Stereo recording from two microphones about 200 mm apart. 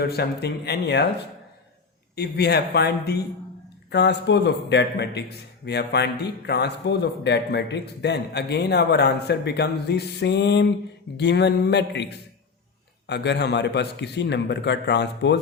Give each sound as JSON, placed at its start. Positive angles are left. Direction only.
{"t": 0.0, "sound": "a man's voice", "side_deg": 55}
{"t": 2.1, "sound": "a man's voice", "side_deg": 55}